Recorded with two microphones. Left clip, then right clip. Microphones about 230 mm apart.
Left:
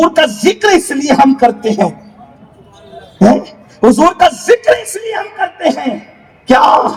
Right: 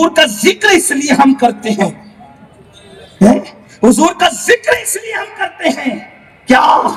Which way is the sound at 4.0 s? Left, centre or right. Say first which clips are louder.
Left 3 dB; centre.